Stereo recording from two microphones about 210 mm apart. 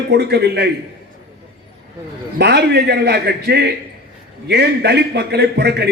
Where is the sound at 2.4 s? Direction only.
50° right (ahead or behind).